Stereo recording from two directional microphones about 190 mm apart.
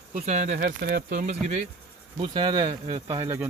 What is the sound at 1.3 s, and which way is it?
Speech, 35° right (ahead or behind).